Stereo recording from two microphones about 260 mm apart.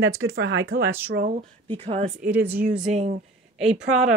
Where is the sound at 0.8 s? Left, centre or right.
Centre.